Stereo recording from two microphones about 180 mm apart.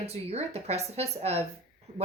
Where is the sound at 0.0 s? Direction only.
35° right (ahead or behind).